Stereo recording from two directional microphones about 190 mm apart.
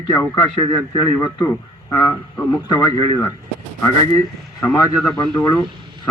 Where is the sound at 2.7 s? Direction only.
25° left (ahead or behind).